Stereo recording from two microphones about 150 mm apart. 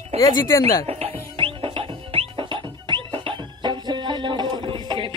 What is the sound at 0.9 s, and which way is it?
Music, 40° right (ahead or behind).